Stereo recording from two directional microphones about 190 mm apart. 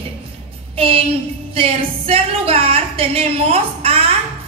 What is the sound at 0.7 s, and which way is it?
Child singing, 30° right (ahead or behind).